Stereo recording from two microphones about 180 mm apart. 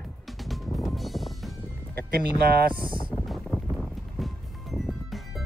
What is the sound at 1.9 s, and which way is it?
Speech, 60° right (ahead or behind).